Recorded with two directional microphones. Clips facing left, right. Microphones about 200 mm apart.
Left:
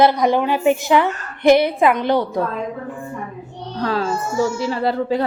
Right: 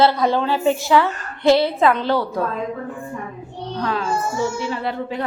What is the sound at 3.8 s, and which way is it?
A child's voice, 35° left (ahead or behind).